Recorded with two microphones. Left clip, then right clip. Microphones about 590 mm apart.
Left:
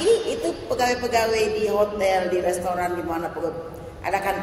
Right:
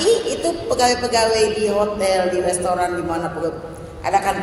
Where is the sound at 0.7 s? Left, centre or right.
Left.